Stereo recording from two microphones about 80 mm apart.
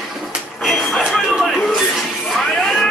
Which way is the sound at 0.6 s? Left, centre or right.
Centre.